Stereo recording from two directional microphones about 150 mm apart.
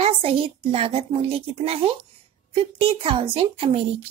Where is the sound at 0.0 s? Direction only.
40° right (ahead or behind).